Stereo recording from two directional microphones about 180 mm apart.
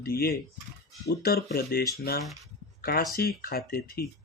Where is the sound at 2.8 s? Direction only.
55° left (ahead or behind).